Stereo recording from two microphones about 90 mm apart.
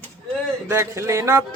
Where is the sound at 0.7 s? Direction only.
30° right (ahead or behind).